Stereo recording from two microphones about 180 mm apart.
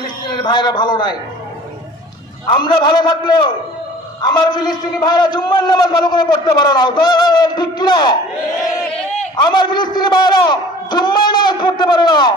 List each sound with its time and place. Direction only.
0.0 s a sound: 25° left (ahead or behind)
2.4 s a man's voice: 25° left (ahead or behind)
9.4 s a man's voice: 25° left (ahead or behind)